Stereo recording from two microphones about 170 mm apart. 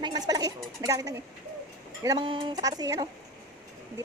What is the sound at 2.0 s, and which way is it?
Speech, 25° right (ahead or behind).